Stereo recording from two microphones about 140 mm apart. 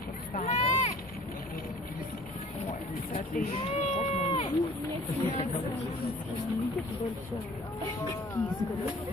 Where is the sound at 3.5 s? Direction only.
50° left (ahead or behind).